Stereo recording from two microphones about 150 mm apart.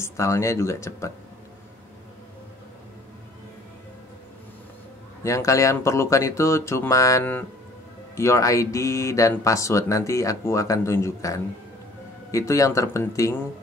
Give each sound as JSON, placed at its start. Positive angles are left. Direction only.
{"t": 0.0, "sound": "speech", "side_deg": 20}
{"t": 5.2, "sound": "speech", "side_deg": 20}